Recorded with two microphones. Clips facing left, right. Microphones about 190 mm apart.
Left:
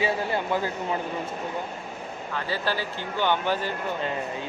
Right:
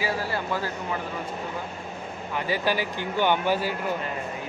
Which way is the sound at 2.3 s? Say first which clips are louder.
Right 3 dB; 15° right (ahead or behind).